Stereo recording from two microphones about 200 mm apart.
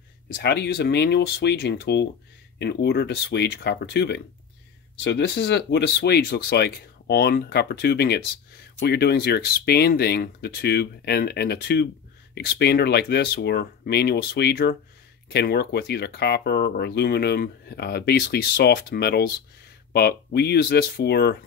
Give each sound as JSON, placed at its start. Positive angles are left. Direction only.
{"t": 0.4, "sound": "speech", "side_deg": 55}